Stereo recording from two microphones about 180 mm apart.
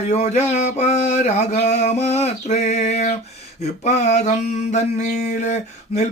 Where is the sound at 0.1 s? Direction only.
40° left (ahead or behind).